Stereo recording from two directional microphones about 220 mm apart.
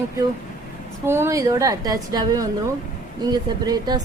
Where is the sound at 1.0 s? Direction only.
10° right (ahead or behind).